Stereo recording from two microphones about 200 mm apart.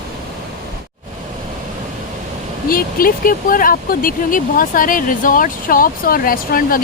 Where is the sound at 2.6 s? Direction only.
45° left (ahead or behind).